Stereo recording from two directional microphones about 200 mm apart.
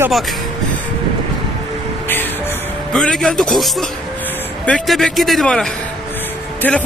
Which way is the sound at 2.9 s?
5° left (ahead or behind).